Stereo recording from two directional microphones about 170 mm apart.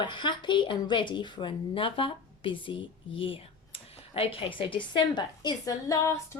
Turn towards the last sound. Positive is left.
turn(degrees=20)  # may be behind; listen again after turning